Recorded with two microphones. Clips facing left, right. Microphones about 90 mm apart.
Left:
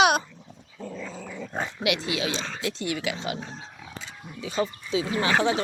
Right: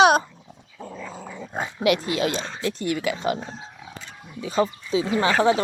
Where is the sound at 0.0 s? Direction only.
35° right (ahead or behind).